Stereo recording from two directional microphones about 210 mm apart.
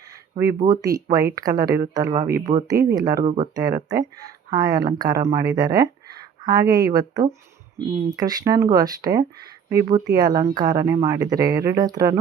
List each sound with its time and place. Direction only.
0.6 s speech: 15° right (ahead or behind)